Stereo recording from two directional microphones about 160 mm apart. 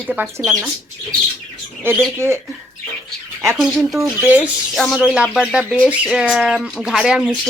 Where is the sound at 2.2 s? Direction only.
15° right (ahead or behind).